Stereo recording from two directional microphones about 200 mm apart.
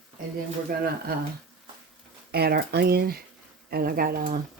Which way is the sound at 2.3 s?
55° right (ahead or behind).